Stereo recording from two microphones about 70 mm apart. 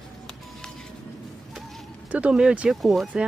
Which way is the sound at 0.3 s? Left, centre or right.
Centre.